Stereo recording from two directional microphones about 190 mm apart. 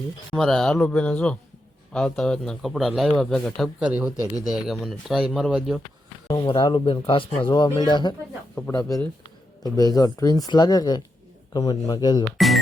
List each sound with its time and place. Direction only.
0.3 s a man's voice: centre (ahead or behind)
6.2 s speech: 25° left (ahead or behind)